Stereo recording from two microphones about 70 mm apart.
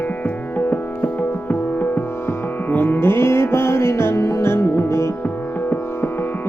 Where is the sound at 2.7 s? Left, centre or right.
Left.